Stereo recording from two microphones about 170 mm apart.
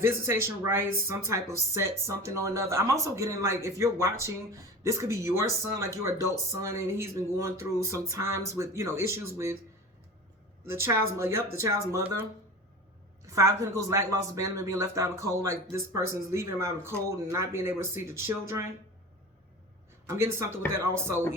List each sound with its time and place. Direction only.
0.0 s speech: 15° right (ahead or behind)
10.7 s speech: 15° right (ahead or behind)
13.2 s speech: 20° right (ahead or behind)
20.1 s speech: 15° right (ahead or behind)